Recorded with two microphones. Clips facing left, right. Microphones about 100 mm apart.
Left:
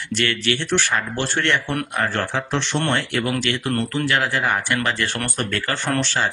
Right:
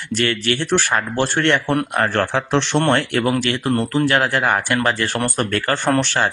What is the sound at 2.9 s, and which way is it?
Speech, 55° right (ahead or behind).